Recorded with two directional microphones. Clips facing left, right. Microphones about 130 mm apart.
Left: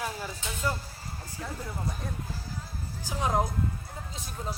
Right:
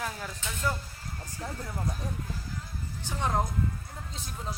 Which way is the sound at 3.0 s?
10° left (ahead or behind).